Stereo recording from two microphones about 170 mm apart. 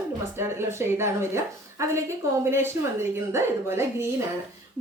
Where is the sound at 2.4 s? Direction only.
15° right (ahead or behind).